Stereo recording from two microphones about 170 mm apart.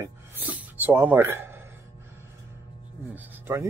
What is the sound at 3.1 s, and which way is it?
Speech, 10° right (ahead or behind).